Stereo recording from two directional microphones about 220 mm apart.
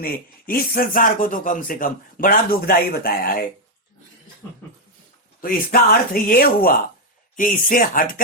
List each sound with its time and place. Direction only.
0.0 s speech: 40° left (ahead or behind)
5.4 s speech: 40° left (ahead or behind)